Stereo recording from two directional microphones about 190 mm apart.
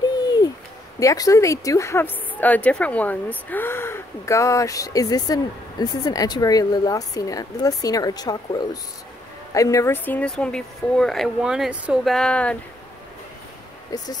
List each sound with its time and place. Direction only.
0.9 s speech: 20° left (ahead or behind)